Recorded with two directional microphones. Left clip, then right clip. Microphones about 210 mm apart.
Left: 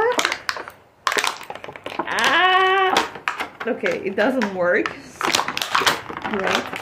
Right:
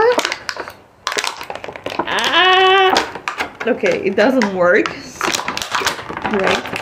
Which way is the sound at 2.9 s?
5° right (ahead or behind).